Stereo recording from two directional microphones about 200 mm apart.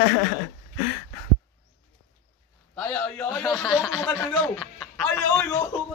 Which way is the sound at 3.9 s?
10° left (ahead or behind).